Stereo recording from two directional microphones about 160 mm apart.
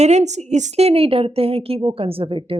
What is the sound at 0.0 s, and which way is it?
Speech, 45° right (ahead or behind).